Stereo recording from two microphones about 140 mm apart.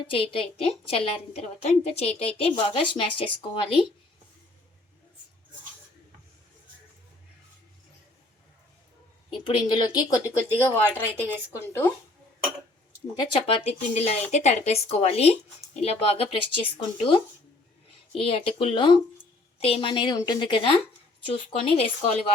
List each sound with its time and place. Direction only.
0.0 s speech: 40° left (ahead or behind)
9.3 s speech: 35° left (ahead or behind)
11.6 s speech: 15° left (ahead or behind)
13.1 s speech: 35° left (ahead or behind)
19.5 s speech: 45° left (ahead or behind)